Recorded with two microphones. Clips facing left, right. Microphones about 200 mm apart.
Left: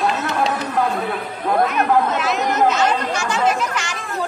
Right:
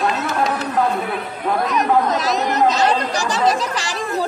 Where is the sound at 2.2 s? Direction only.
35° right (ahead or behind).